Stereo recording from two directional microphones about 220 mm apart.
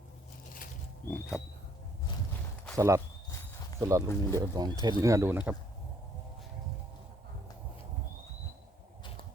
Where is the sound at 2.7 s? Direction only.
15° right (ahead or behind).